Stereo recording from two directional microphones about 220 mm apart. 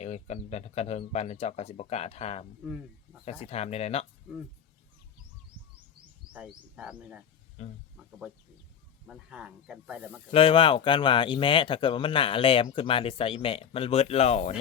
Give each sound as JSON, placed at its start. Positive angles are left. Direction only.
{"t": 0.0, "sound": "speech", "side_deg": 30}
{"t": 6.3, "sound": "speech", "side_deg": -5}
{"t": 7.6, "sound": "speech", "side_deg": 30}
{"t": 9.0, "sound": "speech", "side_deg": -5}
{"t": 10.3, "sound": "speech", "side_deg": 25}